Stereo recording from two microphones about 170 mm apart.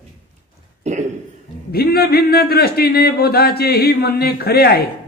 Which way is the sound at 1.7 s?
65° left (ahead or behind).